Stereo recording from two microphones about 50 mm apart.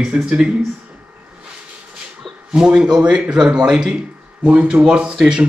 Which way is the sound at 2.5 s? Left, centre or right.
Centre.